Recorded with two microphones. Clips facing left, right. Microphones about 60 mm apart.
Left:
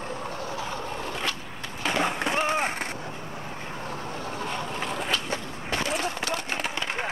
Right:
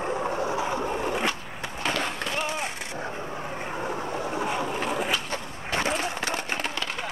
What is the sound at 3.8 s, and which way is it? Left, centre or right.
Boat, centre.